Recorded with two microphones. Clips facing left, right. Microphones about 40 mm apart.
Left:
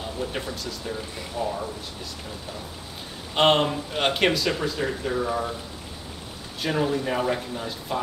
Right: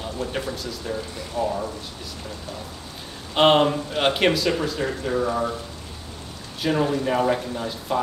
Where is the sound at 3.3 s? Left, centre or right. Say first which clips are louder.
Right 3 dB; centre.